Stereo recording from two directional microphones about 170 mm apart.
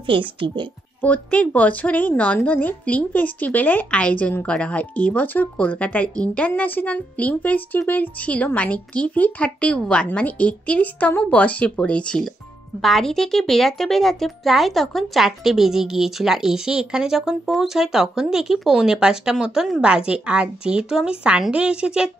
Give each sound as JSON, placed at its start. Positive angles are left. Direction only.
{"t": 0.4, "sound": "speech", "side_deg": -90}
{"t": 1.0, "sound": "speech", "side_deg": 10}